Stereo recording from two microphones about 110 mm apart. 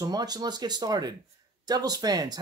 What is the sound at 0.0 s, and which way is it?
Speech, 35° right (ahead or behind).